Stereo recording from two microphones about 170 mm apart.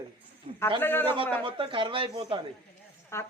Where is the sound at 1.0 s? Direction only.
30° right (ahead or behind).